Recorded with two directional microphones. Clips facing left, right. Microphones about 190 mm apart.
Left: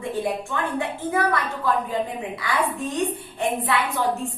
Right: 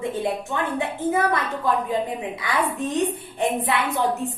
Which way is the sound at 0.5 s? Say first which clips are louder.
Right 1 dB; 20° right (ahead or behind).